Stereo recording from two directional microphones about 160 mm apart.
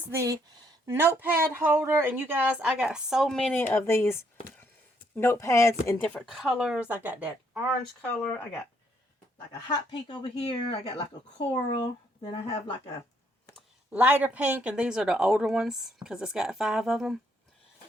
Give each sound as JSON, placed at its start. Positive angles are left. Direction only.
{"t": 0.1, "sound": "speech", "side_deg": -20}
{"t": 6.1, "sound": "speech", "side_deg": 0}
{"t": 8.0, "sound": "speech", "side_deg": 10}
{"t": 9.5, "sound": "speech", "side_deg": 25}
{"t": 10.4, "sound": "speech", "side_deg": 35}
{"t": 13.9, "sound": "speech", "side_deg": -10}